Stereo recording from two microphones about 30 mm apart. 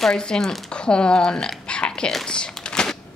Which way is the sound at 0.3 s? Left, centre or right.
Left.